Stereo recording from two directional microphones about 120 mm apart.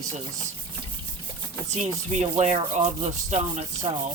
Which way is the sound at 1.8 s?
70° right (ahead or behind).